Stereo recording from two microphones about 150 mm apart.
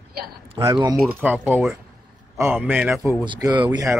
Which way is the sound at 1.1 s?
10° right (ahead or behind).